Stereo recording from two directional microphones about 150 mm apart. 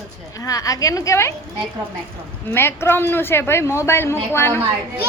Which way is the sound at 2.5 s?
15° left (ahead or behind).